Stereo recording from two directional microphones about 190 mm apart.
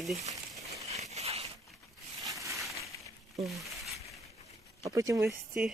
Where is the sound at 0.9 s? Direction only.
35° right (ahead or behind).